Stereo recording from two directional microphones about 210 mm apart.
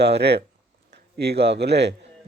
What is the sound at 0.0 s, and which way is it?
A man's voice, 50° right (ahead or behind).